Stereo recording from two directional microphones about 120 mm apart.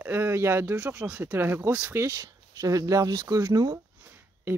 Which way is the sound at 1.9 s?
20° right (ahead or behind).